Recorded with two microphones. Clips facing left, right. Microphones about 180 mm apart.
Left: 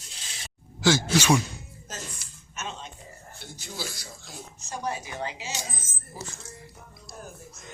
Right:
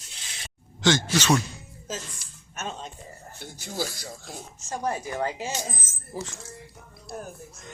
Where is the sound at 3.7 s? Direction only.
45° right (ahead or behind).